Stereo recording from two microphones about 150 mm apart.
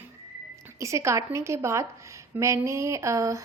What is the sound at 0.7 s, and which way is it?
A woman's voice, 20° right (ahead or behind).